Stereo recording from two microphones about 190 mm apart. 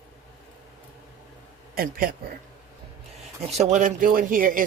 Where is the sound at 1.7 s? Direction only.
50° right (ahead or behind).